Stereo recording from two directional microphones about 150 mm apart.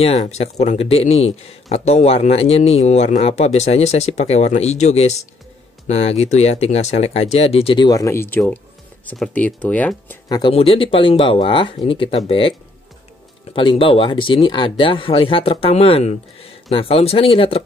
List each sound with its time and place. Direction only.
0.0 s speech: 45° left (ahead or behind); by 10.1 s 10° left (ahead or behind)
10.2 s speech: 25° left (ahead or behind)
10.5 s speech: 40° left (ahead or behind)